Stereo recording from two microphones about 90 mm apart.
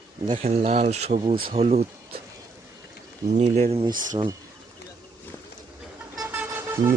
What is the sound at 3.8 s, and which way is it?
Speech, 55° right (ahead or behind).